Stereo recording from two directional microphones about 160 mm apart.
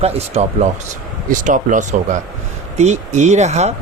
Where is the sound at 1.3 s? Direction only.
55° right (ahead or behind).